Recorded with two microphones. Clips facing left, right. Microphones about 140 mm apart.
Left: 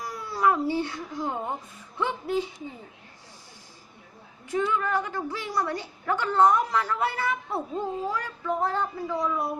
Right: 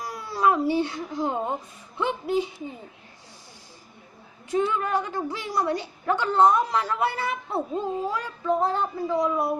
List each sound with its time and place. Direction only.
0.1 s speech: 15° right (ahead or behind)
4.5 s a woman's voice: 25° right (ahead or behind)